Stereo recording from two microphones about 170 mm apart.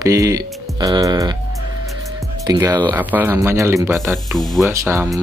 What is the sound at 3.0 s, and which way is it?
Speech, 10° right (ahead or behind).